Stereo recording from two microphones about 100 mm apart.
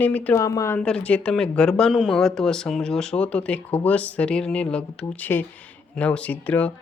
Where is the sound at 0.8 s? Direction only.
10° left (ahead or behind).